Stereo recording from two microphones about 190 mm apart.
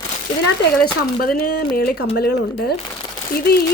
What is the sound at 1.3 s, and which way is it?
Speech, 55° left (ahead or behind).